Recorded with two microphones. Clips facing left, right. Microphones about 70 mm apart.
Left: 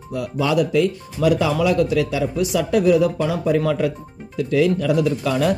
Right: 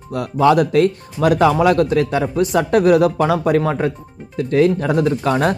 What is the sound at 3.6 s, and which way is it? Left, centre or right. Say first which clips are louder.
Speech: right 2 dB; right.